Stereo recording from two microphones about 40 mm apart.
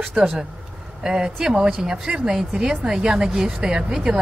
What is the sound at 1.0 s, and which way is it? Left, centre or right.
Speech, centre.